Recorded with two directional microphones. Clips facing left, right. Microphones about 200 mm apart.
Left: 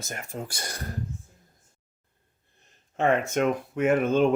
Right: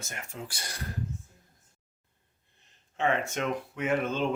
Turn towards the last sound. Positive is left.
turn(degrees=50)  # may be behind; listen again after turning